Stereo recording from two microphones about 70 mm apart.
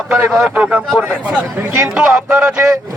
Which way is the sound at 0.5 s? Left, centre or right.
Centre.